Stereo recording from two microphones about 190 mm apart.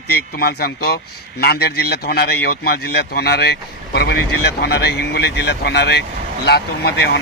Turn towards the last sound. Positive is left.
turn(degrees=60)  # may be behind; listen again after turning